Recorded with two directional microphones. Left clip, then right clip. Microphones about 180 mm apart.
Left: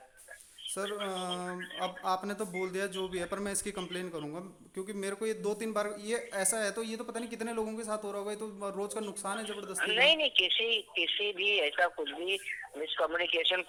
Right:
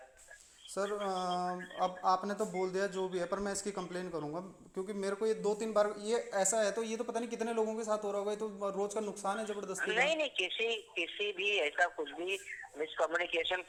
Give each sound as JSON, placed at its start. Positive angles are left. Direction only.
{"t": 1.0, "sound": "speech", "side_deg": 15}
{"t": 9.8, "sound": "speech", "side_deg": -45}